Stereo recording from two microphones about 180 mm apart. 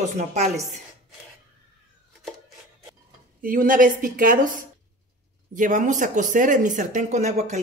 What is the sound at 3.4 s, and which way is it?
Speech, 50° right (ahead or behind).